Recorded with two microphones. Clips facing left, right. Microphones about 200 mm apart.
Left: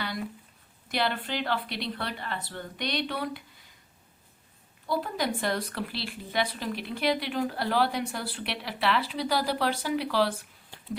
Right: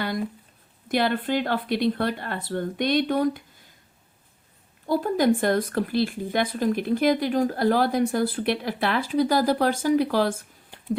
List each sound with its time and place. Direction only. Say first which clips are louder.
0.9 s speech: right 7 dB; 50° right (ahead or behind)
4.9 s speech: right 9 dB; 45° right (ahead or behind)